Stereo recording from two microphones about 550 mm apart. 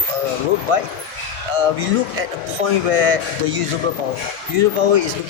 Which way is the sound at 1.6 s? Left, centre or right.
Right.